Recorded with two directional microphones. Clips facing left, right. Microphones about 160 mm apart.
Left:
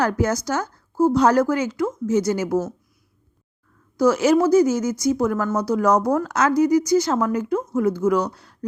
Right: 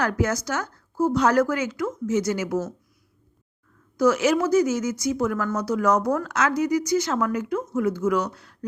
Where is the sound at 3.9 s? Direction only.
35° left (ahead or behind).